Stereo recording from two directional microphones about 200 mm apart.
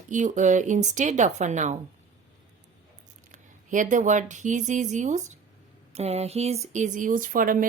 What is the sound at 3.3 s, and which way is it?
A woman's voice, 40° right (ahead or behind).